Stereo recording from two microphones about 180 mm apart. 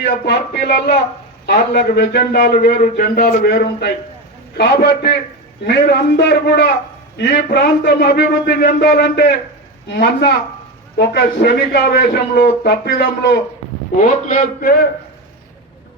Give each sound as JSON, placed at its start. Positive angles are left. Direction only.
{"t": 0.0, "sound": "a man's voice", "side_deg": 65}
{"t": 13.9, "sound": "a man's voice", "side_deg": 45}